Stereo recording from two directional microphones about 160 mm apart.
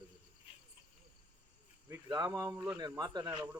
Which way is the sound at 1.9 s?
20° right (ahead or behind).